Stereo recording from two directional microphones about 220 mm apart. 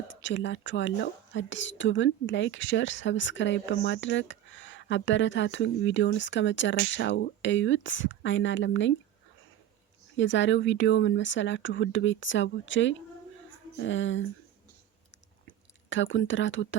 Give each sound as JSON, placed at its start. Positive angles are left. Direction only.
{"t": 0.1, "sound": "speech", "side_deg": 55}
{"t": 10.2, "sound": "speech", "side_deg": 55}
{"t": 15.4, "sound": "chewing", "side_deg": 60}